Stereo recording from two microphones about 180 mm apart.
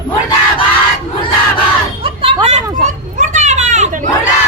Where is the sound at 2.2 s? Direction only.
35° right (ahead or behind).